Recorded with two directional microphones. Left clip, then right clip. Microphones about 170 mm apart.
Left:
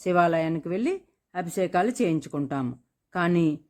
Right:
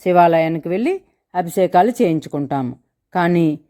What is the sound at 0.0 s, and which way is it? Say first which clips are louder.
A woman's voice: right 10 dB; 15° right (ahead or behind).